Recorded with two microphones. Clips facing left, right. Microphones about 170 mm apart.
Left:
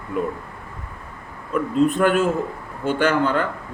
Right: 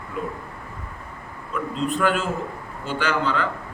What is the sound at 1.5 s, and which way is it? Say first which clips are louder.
A man's voice: left 7 dB; 50° left (ahead or behind).